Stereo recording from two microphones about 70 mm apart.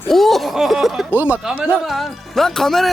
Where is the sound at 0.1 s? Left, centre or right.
Centre.